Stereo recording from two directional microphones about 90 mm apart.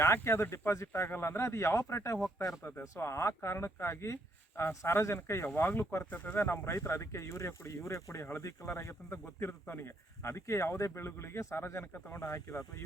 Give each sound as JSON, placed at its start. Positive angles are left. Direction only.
{"t": 0.0, "sound": "speech", "side_deg": 25}